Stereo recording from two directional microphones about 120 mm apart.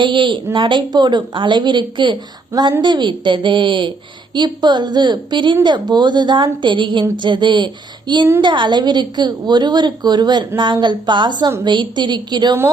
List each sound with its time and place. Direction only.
0.0 s a woman's voice: 45° right (ahead or behind)